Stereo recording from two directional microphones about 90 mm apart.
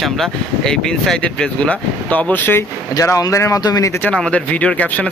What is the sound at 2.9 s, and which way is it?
Speech, 40° left (ahead or behind).